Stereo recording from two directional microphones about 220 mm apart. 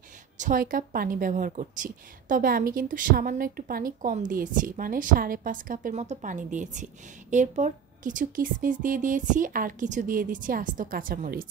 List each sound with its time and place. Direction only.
0.4 s a woman's voice: 40° right (ahead or behind)